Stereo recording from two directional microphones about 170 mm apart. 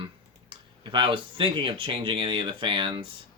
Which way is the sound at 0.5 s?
30° right (ahead or behind).